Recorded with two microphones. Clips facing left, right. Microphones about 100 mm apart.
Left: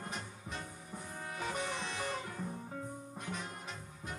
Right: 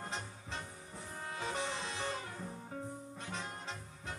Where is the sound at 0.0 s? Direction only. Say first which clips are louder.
Even; 30° right (ahead or behind).